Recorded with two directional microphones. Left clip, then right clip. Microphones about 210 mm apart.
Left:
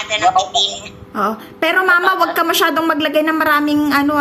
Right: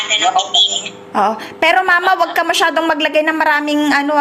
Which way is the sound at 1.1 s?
20° left (ahead or behind).